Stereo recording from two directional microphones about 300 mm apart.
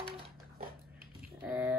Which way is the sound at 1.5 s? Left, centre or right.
Centre.